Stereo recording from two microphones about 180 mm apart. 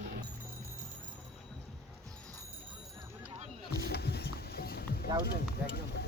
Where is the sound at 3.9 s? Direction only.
65° left (ahead or behind).